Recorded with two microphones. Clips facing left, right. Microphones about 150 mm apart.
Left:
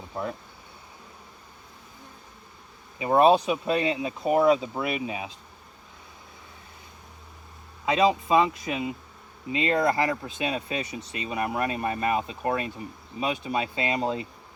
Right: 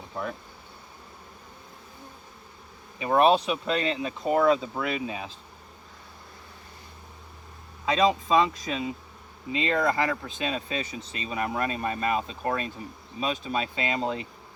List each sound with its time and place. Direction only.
0.1 s speech: 20° left (ahead or behind)
3.0 s speech: 20° left (ahead or behind)
7.9 s speech: 15° left (ahead or behind)
9.6 s speech: 20° left (ahead or behind)
10.8 s speech: 25° right (ahead or behind)
11.3 s speech: 15° left (ahead or behind)